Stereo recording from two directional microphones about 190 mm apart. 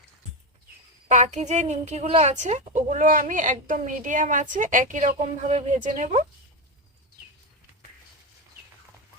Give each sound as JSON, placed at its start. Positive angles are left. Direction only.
{"t": 1.0, "sound": "a woman's voice", "side_deg": -40}